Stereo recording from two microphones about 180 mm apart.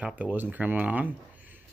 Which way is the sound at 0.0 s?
10° right (ahead or behind).